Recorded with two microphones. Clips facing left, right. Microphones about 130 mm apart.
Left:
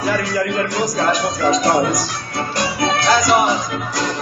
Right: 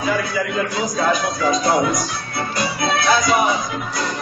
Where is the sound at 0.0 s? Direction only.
75° left (ahead or behind).